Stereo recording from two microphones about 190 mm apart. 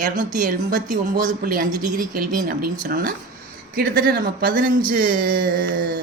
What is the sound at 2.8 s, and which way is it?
Speech, 45° right (ahead or behind).